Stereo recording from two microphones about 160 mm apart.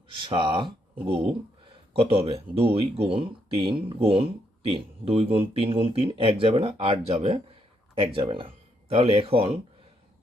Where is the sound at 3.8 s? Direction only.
35° right (ahead or behind).